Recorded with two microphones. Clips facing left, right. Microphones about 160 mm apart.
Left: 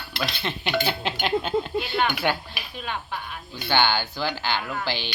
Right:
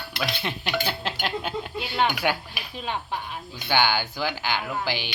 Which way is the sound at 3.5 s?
10° right (ahead or behind).